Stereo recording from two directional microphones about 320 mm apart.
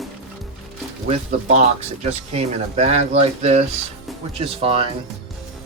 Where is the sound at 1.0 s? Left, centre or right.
Centre.